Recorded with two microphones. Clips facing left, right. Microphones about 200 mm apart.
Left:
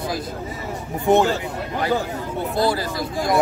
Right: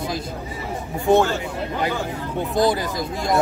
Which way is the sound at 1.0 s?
20° left (ahead or behind).